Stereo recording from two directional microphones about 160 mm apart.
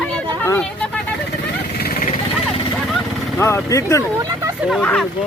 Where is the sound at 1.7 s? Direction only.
70° left (ahead or behind).